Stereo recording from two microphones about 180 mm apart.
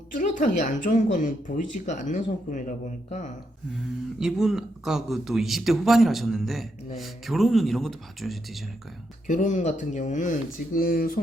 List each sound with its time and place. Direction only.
0.2 s a woman's voice: 45° left (ahead or behind)
4.2 s speech: centre (ahead or behind)
9.2 s a woman's voice: 45° left (ahead or behind)
10.8 s speech: 55° left (ahead or behind)